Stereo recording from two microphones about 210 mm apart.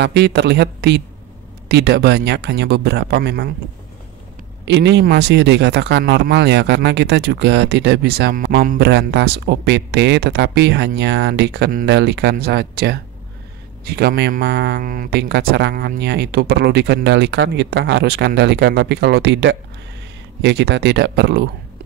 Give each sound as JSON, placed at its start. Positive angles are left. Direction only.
{"t": 0.0, "sound": "speech", "side_deg": -55}
{"t": 4.6, "sound": "speech", "side_deg": -55}